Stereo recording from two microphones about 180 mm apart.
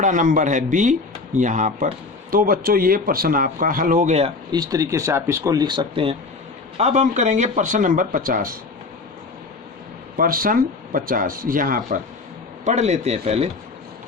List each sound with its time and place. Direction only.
0.0 s speech: 45° right (ahead or behind)
4.5 s speech: 20° right (ahead or behind)
6.7 s speech: 40° right (ahead or behind)
10.2 s speech: 50° right (ahead or behind)
12.6 s speech: 40° right (ahead or behind)